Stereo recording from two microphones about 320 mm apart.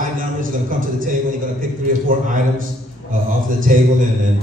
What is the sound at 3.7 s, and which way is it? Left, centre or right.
Speech, right.